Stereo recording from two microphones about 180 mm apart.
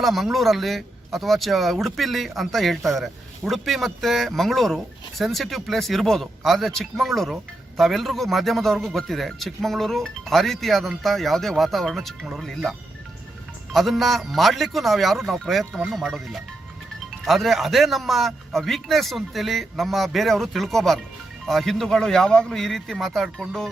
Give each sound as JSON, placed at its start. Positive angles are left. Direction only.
{"t": 0.0, "sound": "speech", "side_deg": 0}
{"t": 13.7, "sound": "speech", "side_deg": 0}